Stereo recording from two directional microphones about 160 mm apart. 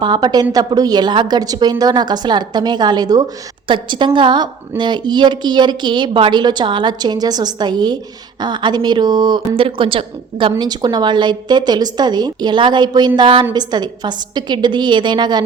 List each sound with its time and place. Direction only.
0.0 s a woman's voice: 25° right (ahead or behind)